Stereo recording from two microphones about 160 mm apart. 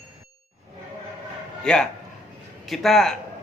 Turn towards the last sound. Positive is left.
turn(degrees=0)  # may be behind; listen again after turning